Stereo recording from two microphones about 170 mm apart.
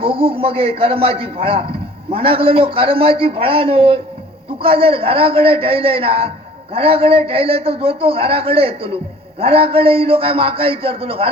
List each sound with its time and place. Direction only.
0.0 s a man's voice: 30° right (ahead or behind)